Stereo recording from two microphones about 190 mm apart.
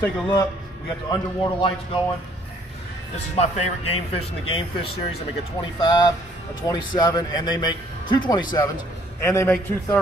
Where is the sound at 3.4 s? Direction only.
35° left (ahead or behind).